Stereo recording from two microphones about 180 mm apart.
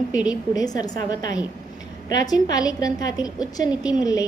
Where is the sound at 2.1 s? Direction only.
20° left (ahead or behind).